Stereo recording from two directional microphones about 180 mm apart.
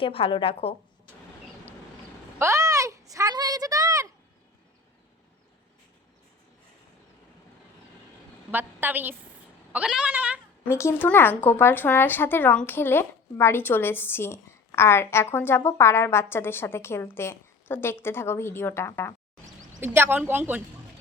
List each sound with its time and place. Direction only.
0.0 s a woman's voice: 30° left (ahead or behind)
2.4 s a sound: 15° right (ahead or behind)
8.4 s a woman's voice: 10° right (ahead or behind)
10.7 s speech: 15° left (ahead or behind)
19.8 s a woman's voice: 10° right (ahead or behind)